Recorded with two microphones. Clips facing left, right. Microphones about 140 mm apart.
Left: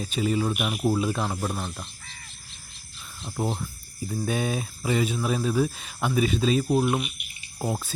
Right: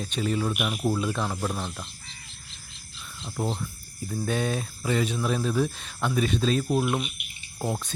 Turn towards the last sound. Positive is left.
turn(degrees=5)  # may be behind; listen again after turning